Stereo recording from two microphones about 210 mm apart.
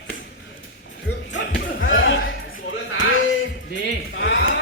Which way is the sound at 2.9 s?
65° left (ahead or behind).